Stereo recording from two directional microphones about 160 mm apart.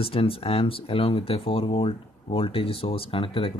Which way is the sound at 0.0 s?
35° left (ahead or behind).